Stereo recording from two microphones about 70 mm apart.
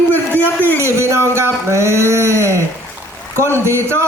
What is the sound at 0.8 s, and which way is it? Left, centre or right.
A man's voice, right.